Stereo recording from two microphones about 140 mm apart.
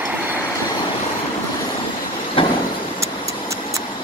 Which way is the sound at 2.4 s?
40° left (ahead or behind).